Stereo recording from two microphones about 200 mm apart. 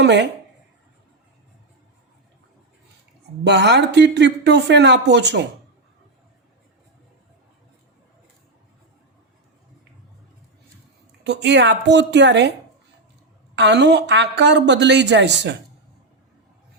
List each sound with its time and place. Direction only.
0.0 s speech: 60° right (ahead or behind)
3.4 s speech: 60° right (ahead or behind)
11.2 s speech: 60° right (ahead or behind)
13.6 s speech: 60° right (ahead or behind)